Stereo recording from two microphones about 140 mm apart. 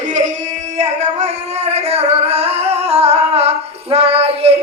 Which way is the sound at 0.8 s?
55° right (ahead or behind).